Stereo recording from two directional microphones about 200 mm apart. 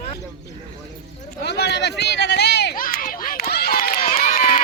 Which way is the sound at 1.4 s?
55° left (ahead or behind).